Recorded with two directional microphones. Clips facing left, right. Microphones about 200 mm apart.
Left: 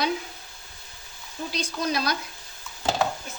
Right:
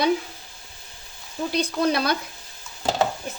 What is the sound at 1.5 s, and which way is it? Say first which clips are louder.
Speech: right 6 dB; 60° right (ahead or behind).